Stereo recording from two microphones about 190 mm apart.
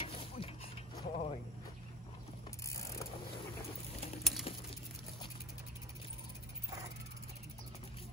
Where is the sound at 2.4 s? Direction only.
15° left (ahead or behind).